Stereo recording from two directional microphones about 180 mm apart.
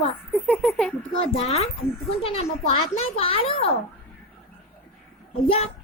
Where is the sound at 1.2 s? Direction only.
35° left (ahead or behind).